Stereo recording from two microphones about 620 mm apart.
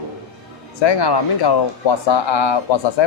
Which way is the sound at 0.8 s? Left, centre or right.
Left.